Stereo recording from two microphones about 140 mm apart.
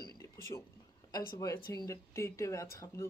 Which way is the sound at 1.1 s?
25° left (ahead or behind).